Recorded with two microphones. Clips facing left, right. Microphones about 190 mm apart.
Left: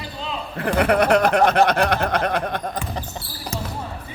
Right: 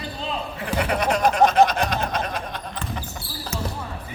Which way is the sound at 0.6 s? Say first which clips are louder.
Left 7 dB; 60° left (ahead or behind).